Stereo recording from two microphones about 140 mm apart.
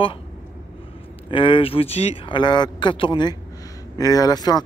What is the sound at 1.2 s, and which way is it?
Speech, 40° left (ahead or behind).